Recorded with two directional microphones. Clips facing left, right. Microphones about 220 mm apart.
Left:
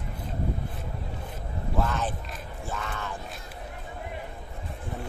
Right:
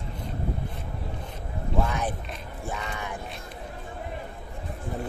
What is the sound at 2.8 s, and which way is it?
Music, 10° right (ahead or behind).